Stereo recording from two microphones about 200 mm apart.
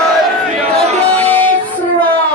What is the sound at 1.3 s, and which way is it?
Music, 10° left (ahead or behind).